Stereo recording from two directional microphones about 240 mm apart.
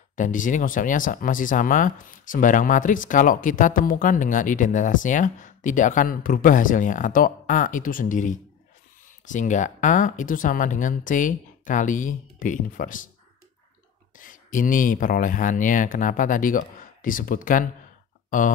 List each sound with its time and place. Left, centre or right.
0.1 s speech: left
14.1 s speech: left